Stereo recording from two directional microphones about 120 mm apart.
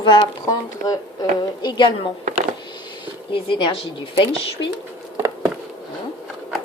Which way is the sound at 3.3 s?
45° left (ahead or behind).